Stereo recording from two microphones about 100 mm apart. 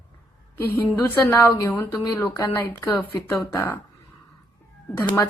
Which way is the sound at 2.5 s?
25° left (ahead or behind).